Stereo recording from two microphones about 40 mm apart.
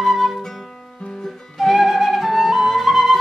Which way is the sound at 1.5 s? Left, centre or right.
Centre.